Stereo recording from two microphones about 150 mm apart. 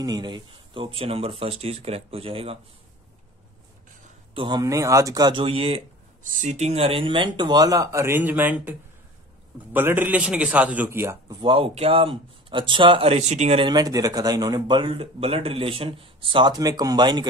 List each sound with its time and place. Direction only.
0.0 s speech: 30° right (ahead or behind)
4.3 s speech: 35° right (ahead or behind)
5.4 s speech: 40° right (ahead or behind)
6.2 s a man's voice: 55° right (ahead or behind); by 11.3 s 15° right (ahead or behind)
11.4 s speech: 40° right (ahead or behind)
13.7 s speech: 25° right (ahead or behind)